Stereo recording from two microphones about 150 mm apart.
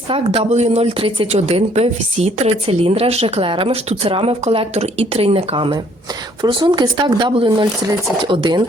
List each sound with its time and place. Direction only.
0.1 s speech: 40° right (ahead or behind)